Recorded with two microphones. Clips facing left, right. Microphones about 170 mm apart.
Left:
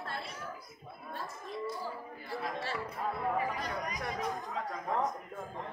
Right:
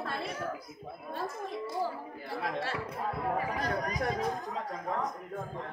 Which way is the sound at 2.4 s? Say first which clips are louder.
Right 3 dB; 65° right (ahead or behind).